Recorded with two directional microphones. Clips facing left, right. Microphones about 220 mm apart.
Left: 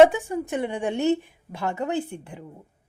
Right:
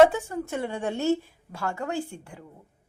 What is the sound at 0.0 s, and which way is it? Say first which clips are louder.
A woman's voice: left 3 dB; 15° left (ahead or behind).